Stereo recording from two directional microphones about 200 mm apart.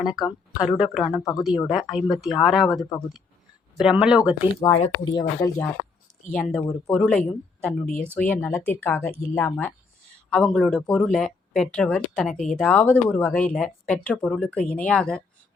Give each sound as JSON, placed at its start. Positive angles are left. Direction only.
{"t": 0.2, "sound": "speech", "side_deg": 20}
{"t": 0.8, "sound": "speech", "side_deg": -5}
{"t": 1.2, "sound": "speech", "side_deg": 15}
{"t": 1.5, "sound": "speech", "side_deg": 0}
{"t": 4.8, "sound": "speech", "side_deg": 20}
{"t": 6.3, "sound": "speech", "side_deg": 5}